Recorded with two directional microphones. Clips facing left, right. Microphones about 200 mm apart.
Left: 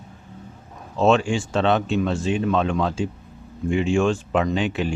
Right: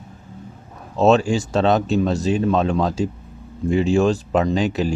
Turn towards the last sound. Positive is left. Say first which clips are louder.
# right 3 dB
turn(degrees=-40)  # may be behind; listen again after turning